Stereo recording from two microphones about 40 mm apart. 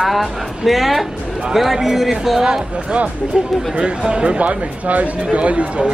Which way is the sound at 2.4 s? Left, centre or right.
Right.